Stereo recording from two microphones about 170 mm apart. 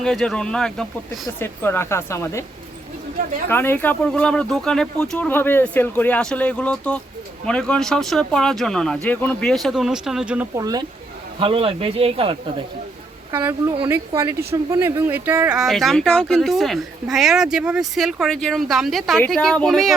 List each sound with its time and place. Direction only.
0.0 s speech: centre (ahead or behind)
1.4 s speech: 15° left (ahead or behind)
3.5 s speech: 10° left (ahead or behind); by 10.5 s 5° right (ahead or behind)
10.5 s speech: 20° right (ahead or behind)
11.3 s speech: 30° right (ahead or behind)
13.3 s a woman's voice: 15° right (ahead or behind)